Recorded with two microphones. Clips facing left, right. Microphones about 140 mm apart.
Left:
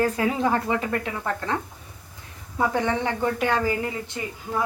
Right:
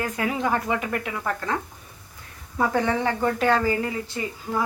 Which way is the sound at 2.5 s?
20° left (ahead or behind).